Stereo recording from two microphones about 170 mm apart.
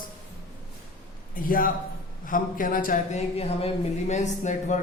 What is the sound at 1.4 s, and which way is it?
A man's voice, 55° left (ahead or behind).